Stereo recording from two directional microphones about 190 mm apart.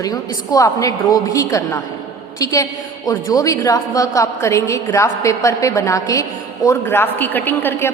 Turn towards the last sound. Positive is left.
turn(degrees=10)  # may be behind; listen again after turning